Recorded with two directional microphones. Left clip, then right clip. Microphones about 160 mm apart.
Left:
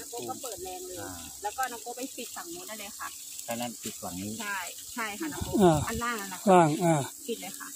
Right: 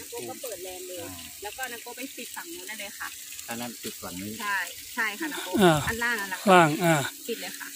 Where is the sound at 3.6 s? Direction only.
35° left (ahead or behind).